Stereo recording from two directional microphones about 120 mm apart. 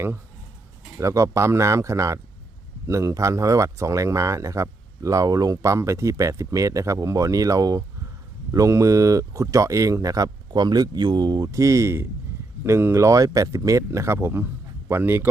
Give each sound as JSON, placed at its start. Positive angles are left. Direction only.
{"t": 0.9, "sound": "speech", "side_deg": -25}